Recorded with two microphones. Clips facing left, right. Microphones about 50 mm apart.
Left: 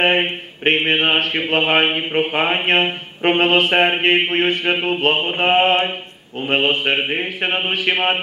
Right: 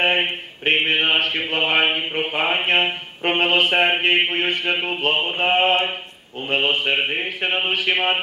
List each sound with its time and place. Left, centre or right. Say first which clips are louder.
0.7 s mantra: left 2 dB; left